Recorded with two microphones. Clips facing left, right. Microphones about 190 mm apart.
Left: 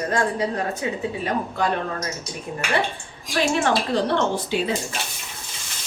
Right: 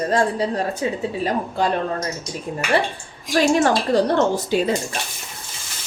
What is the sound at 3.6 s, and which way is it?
A woman's voice, 40° right (ahead or behind).